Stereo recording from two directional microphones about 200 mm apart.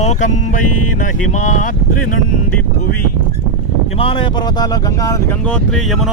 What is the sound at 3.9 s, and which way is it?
Speech, 25° left (ahead or behind).